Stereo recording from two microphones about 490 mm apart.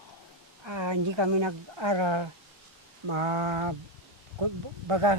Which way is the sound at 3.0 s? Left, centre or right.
Right.